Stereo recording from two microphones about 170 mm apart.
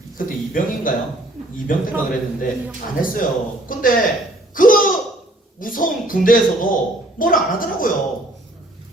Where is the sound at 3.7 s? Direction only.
55° left (ahead or behind).